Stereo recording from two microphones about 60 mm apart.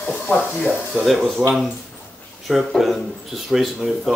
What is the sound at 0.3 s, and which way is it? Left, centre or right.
Speech, left.